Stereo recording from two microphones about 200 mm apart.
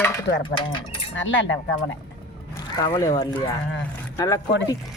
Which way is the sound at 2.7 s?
20° left (ahead or behind).